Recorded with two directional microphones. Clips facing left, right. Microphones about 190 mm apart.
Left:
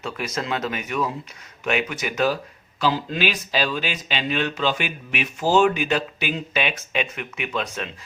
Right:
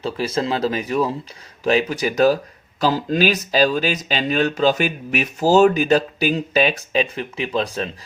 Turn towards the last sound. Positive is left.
turn(degrees=-35)  # may be behind; listen again after turning